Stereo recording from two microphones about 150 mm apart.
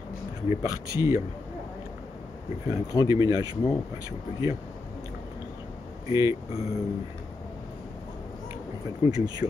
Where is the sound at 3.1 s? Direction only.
25° right (ahead or behind).